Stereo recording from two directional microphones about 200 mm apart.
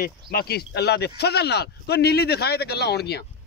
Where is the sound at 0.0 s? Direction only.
50° left (ahead or behind).